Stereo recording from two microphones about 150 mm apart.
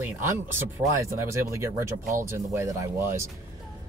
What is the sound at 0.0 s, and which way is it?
Speech, 15° right (ahead or behind).